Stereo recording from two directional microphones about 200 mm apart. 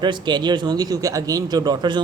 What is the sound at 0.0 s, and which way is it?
Speech, 20° right (ahead or behind).